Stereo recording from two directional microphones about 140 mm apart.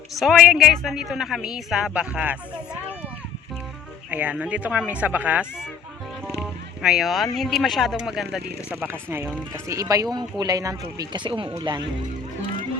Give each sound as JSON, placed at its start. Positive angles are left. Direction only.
{"t": 0.2, "sound": "a man's voice", "side_deg": -5}
{"t": 4.1, "sound": "speech", "side_deg": -10}
{"t": 6.8, "sound": "a man's voice", "side_deg": -5}
{"t": 8.8, "sound": "speech", "side_deg": -15}